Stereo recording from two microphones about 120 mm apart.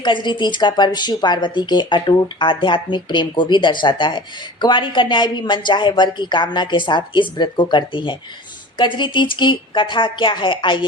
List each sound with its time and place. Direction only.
0.0 s a woman's voice: 40° left (ahead or behind)